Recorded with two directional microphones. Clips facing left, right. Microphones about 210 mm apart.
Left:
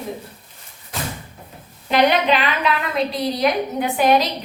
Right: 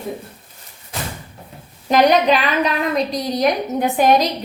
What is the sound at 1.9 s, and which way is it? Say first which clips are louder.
Speech: right 3 dB; 40° right (ahead or behind).